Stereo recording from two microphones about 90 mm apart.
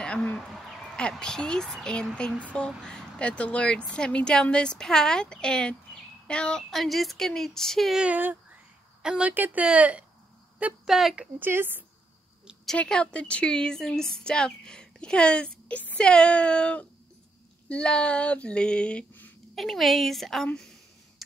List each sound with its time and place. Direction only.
0.0 s speech: 15° left (ahead or behind)
0.5 s a sound: 5° left (ahead or behind)
1.1 s a woman's voice: 5° left (ahead or behind)
6.7 s a woman's voice: centre (ahead or behind)
8.0 s speech: 20° right (ahead or behind)
9.0 s speech: 10° right (ahead or behind)
9.3 s a woman's voice: 20° right (ahead or behind)
11.3 s a woman's voice: 25° right (ahead or behind)
12.7 s a woman's voice: 10° left (ahead or behind)
19.5 s a woman's voice: centre (ahead or behind)